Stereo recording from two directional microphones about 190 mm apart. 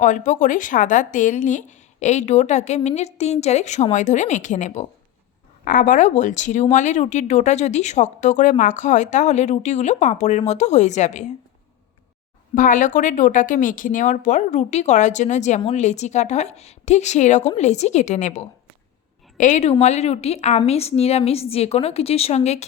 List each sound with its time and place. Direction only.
0.0 s speech: 40° left (ahead or behind)
12.5 s speech: 45° left (ahead or behind)